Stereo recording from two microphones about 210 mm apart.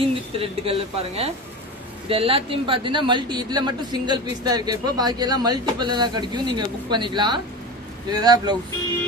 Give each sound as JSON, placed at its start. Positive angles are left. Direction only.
{"t": 0.0, "sound": "speech", "side_deg": -25}